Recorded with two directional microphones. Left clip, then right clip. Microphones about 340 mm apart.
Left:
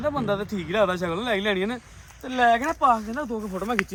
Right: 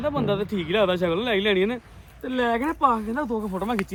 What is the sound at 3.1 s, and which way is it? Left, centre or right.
Speech, centre.